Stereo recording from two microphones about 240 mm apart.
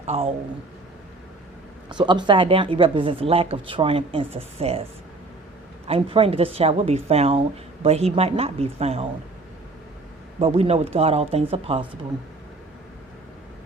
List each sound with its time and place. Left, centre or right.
0.0 s a woman's voice: right
1.9 s a woman's voice: centre
5.9 s a woman's voice: right
10.4 s a woman's voice: right